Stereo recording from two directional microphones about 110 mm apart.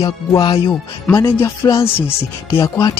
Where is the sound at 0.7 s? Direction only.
25° left (ahead or behind).